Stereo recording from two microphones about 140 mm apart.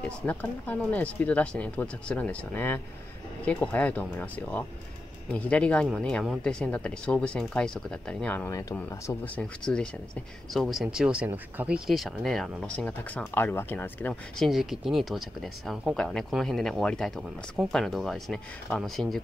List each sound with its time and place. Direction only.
0.3 s speech: 10° left (ahead or behind)
8.5 s speech: 25° left (ahead or behind)
9.0 s speech: 10° left (ahead or behind)
14.4 s speech: centre (ahead or behind)